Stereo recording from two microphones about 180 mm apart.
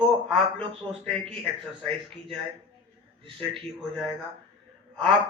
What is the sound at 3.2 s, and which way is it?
Speech, 30° right (ahead or behind).